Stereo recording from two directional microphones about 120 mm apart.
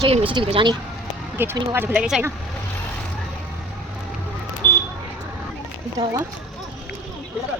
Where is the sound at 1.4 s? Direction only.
15° right (ahead or behind).